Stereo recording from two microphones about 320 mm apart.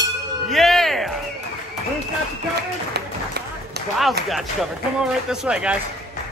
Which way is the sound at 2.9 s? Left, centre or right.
Right.